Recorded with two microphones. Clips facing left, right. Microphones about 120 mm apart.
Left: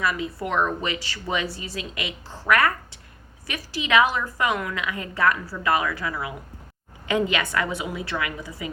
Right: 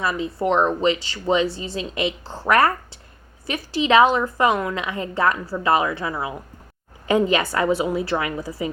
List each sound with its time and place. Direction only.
0.0 s a woman's voice: 30° right (ahead or behind)